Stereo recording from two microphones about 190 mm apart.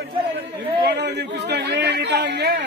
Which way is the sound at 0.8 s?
65° right (ahead or behind).